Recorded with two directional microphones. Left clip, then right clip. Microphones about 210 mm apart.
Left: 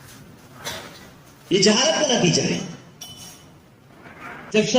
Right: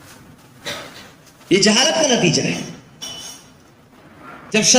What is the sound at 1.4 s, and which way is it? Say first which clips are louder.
Speech: right 3 dB; 30° right (ahead or behind).